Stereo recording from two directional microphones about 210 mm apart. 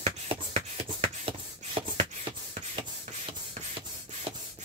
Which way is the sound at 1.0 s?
25° right (ahead or behind).